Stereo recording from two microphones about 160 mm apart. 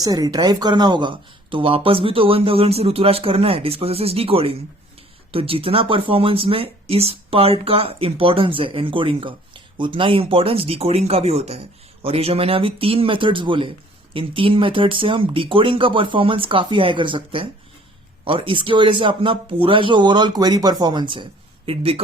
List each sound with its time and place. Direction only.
0.0 s speech: 25° right (ahead or behind)